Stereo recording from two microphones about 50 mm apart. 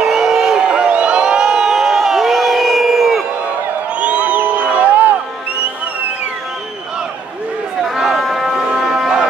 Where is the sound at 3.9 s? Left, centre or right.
Right.